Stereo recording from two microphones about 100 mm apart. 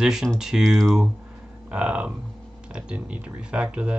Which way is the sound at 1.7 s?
10° right (ahead or behind).